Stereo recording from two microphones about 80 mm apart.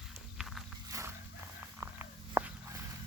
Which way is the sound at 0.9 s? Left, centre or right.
Right.